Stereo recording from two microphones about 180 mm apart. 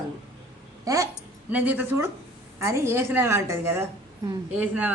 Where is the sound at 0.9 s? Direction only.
20° right (ahead or behind).